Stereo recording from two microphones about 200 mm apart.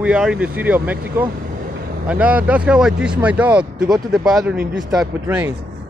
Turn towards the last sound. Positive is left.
turn(degrees=-10)  # may be behind; listen again after turning